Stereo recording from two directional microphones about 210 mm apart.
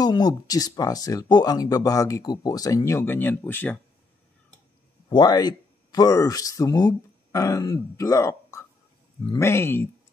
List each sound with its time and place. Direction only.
0.0 s speech: 20° left (ahead or behind)
5.1 s speech: 20° left (ahead or behind)